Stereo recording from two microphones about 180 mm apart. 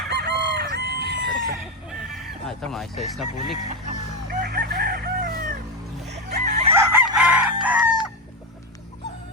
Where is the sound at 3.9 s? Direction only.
55° right (ahead or behind).